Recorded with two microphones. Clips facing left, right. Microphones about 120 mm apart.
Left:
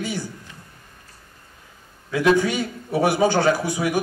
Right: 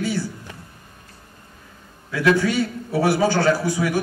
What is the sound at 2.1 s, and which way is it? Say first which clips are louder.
A man's voice: even; 20° left (ahead or behind).